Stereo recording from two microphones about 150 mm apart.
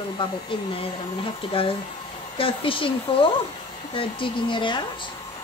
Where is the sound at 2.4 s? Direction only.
35° left (ahead or behind).